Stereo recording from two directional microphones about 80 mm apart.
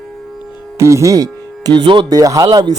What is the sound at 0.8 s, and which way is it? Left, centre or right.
Speech, right.